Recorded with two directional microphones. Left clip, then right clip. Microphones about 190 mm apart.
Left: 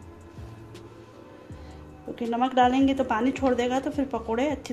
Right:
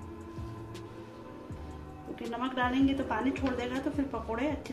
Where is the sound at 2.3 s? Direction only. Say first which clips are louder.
Left 10 dB; 60° left (ahead or behind).